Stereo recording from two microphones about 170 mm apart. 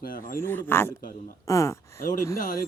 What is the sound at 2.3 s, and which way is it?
Speech, 55° left (ahead or behind).